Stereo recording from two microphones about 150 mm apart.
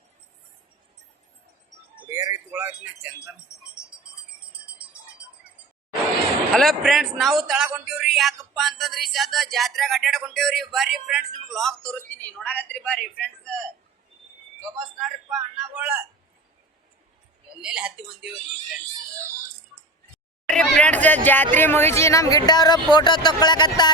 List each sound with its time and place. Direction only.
2.0 s a sound: 20° right (ahead or behind)
6.5 s a man's voice: centre (ahead or behind)
15.4 s speech: 10° right (ahead or behind)
17.6 s speech: 5° right (ahead or behind)
20.5 s speech: 5° left (ahead or behind); by 23.9 s 30° left (ahead or behind)